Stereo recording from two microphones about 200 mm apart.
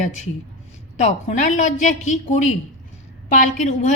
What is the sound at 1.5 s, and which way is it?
A woman's voice, 40° left (ahead or behind).